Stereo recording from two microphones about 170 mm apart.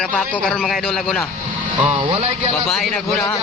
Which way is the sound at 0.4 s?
5° left (ahead or behind).